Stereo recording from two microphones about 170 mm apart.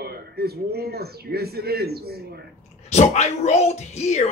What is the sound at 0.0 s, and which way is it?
A man's voice, 65° right (ahead or behind).